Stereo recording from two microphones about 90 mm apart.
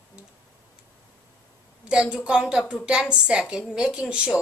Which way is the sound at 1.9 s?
10° right (ahead or behind).